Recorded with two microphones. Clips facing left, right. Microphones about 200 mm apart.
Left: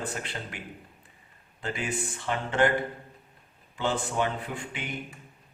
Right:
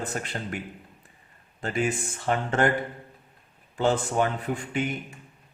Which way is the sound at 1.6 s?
45° right (ahead or behind).